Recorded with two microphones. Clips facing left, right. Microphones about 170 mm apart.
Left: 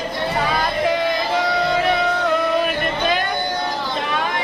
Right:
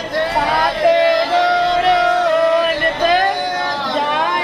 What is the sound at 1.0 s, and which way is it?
Music, 90° right.